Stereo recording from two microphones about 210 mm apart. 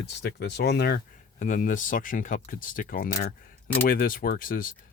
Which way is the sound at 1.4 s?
40° left (ahead or behind).